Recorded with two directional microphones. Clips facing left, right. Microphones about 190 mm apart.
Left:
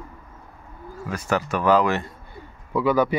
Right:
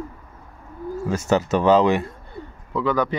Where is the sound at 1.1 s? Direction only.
25° right (ahead or behind).